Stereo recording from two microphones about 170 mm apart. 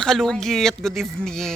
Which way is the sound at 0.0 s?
Centre (ahead or behind).